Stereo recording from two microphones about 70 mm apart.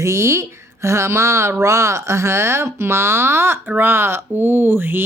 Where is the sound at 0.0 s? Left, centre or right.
Right.